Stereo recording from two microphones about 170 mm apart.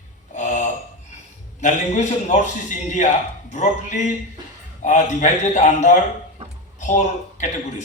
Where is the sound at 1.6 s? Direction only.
45° left (ahead or behind).